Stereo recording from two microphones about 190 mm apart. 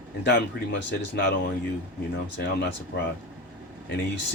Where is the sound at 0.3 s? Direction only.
65° left (ahead or behind).